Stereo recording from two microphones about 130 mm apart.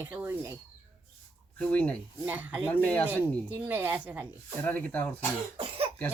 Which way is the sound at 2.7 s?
10° left (ahead or behind).